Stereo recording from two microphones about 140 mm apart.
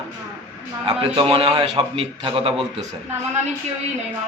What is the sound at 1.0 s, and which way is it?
A man's voice, 40° right (ahead or behind).